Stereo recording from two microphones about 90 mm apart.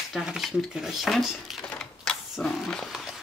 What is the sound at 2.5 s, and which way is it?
Speech, centre (ahead or behind).